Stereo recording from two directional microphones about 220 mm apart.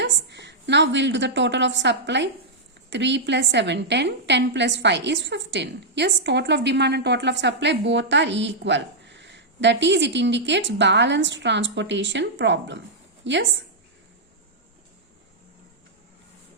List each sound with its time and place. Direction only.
0.0 s a woman's voice: 50° right (ahead or behind)